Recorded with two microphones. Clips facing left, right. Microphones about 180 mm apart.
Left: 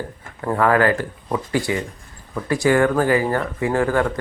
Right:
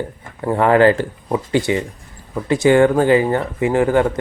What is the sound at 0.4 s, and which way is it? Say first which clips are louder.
Speech: right 4 dB; 25° right (ahead or behind).